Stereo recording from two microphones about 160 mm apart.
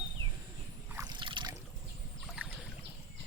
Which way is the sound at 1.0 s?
30° right (ahead or behind).